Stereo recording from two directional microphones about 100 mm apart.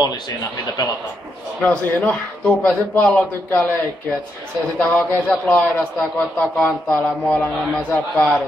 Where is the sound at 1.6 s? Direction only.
15° left (ahead or behind).